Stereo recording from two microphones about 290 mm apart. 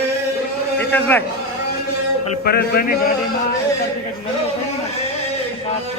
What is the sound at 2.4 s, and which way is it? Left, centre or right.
Speech, left.